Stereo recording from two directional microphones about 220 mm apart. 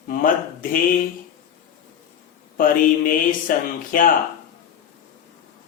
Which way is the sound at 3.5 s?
40° left (ahead or behind).